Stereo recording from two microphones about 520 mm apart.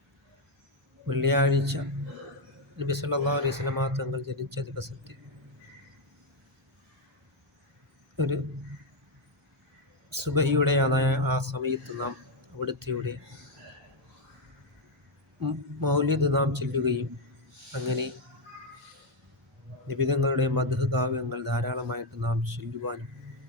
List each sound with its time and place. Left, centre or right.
1.0 s a man's voice: right
8.1 s speech: right
10.1 s a man's voice: right
15.4 s a man's voice: right
19.9 s a man's voice: right